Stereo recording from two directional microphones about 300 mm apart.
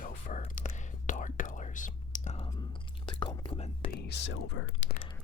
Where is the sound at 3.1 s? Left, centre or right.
Centre.